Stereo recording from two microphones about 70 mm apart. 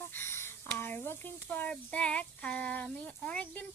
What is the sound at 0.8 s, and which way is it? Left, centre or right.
Speech, left.